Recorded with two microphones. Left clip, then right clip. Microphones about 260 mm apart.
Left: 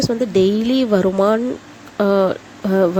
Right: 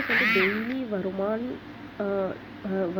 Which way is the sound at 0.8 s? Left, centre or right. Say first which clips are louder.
Left 14 dB; left.